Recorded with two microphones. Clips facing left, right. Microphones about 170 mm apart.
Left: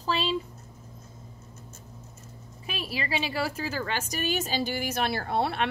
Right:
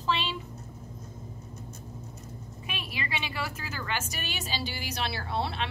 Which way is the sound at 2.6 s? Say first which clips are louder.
Left 5 dB; 35° left (ahead or behind).